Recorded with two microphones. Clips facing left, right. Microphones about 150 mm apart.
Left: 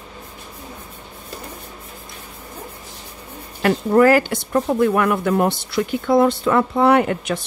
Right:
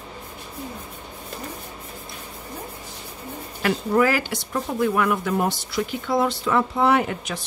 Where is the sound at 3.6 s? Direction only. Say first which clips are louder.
Left 6 dB; 50° left (ahead or behind).